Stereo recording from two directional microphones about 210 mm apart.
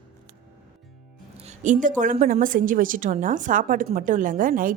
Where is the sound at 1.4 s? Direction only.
35° right (ahead or behind).